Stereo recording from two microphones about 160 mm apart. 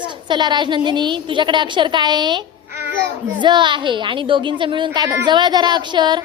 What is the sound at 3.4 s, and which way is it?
A woman's voice, 30° right (ahead or behind).